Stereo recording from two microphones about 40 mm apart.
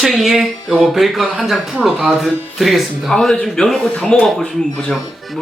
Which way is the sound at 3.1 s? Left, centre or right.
Centre.